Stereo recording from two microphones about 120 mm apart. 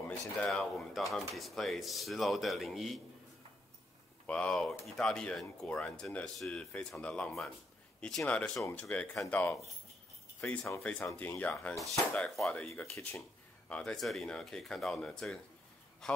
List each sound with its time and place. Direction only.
0.4 s speech: 5° left (ahead or behind)
4.3 s speech: 10° left (ahead or behind)
12.1 s speech: 5° left (ahead or behind)
12.6 s speech: 15° left (ahead or behind)
13.7 s speech: 10° left (ahead or behind)